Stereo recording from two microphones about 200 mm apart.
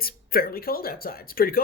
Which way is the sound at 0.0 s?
50° left (ahead or behind).